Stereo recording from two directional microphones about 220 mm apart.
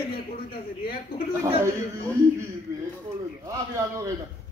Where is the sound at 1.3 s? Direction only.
15° right (ahead or behind).